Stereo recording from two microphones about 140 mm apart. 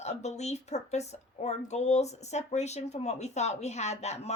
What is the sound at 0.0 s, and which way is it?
A woman's voice, 50° left (ahead or behind).